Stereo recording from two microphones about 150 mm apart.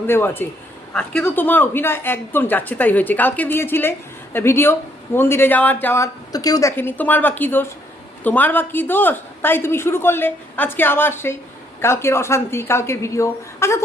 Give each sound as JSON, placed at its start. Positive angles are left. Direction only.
{"t": 0.1, "sound": "speech", "side_deg": 15}